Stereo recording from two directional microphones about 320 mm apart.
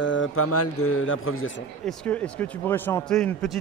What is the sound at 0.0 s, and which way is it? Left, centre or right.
Speech, left.